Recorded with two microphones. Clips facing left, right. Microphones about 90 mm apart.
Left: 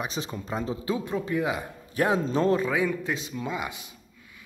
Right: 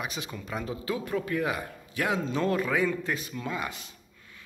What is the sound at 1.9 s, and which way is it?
Speech, 35° left (ahead or behind).